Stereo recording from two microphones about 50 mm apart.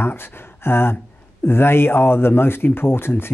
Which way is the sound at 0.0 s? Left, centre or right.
Left.